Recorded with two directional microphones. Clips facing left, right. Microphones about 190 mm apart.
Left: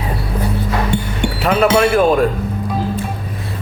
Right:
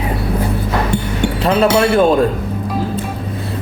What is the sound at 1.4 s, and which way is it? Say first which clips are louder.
Speech: even; 30° right (ahead or behind).